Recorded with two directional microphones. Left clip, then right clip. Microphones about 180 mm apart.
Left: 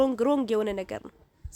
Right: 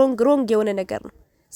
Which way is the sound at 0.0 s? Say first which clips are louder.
Right 7 dB; 35° right (ahead or behind).